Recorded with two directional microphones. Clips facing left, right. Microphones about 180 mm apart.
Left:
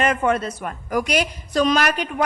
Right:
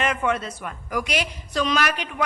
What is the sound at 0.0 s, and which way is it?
A woman's voice, 40° left (ahead or behind).